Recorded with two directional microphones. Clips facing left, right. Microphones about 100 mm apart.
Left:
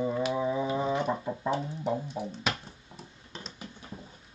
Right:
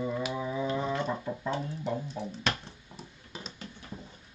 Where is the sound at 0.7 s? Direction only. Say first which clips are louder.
Left 2 dB; 15° left (ahead or behind).